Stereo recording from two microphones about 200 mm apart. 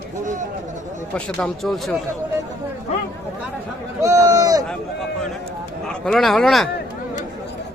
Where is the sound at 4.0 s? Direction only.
15° right (ahead or behind).